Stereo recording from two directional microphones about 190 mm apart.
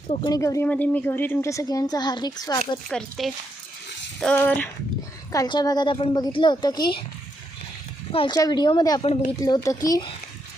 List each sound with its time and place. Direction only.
0.1 s a woman's voice: 30° left (ahead or behind)
0.3 s a woman's voice: 15° left (ahead or behind)
2.7 s a woman's voice: centre (ahead or behind)
5.3 s a woman's voice: 20° left (ahead or behind)
8.1 s a woman's voice: 25° left (ahead or behind)